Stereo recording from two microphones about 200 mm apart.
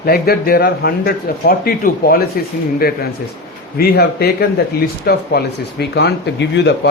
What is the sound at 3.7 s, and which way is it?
Speech, 50° left (ahead or behind).